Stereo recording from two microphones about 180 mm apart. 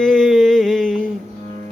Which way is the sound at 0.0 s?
Centre (ahead or behind).